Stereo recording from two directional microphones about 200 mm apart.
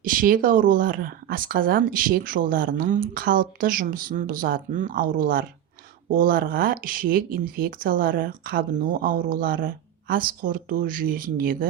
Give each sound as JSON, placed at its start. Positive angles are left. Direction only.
{"t": 0.0, "sound": "speech", "side_deg": -45}